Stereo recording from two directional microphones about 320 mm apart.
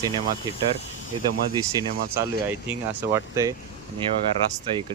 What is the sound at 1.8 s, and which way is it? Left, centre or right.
Speech, centre.